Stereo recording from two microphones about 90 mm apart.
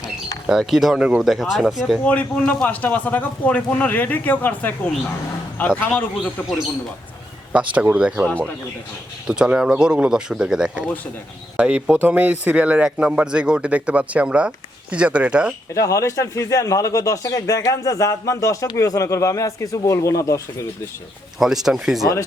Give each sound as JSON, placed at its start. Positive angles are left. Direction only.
{"t": 0.6, "sound": "speech", "side_deg": 0}
{"t": 2.0, "sound": "a man's voice", "side_deg": 15}
{"t": 7.5, "sound": "speech", "side_deg": -15}
{"t": 8.3, "sound": "speech", "side_deg": 15}
{"t": 9.2, "sound": "speech", "side_deg": -10}
{"t": 15.7, "sound": "speech", "side_deg": 35}
{"t": 21.3, "sound": "speech", "side_deg": -5}